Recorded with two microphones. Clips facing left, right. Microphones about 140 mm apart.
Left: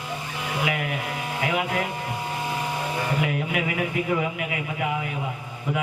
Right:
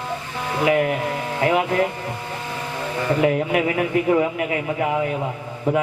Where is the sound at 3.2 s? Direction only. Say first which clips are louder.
Right 7 dB; 35° right (ahead or behind).